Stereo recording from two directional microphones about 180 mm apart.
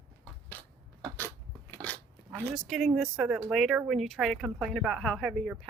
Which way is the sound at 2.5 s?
Centre (ahead or behind).